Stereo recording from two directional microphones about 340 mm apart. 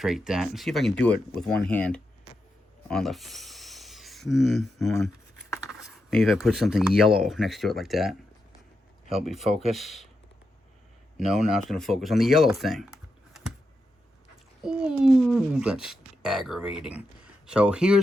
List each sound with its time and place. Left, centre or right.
0.0 s speech: centre
9.2 s speech: centre
11.2 s speech: centre
14.6 s speech: centre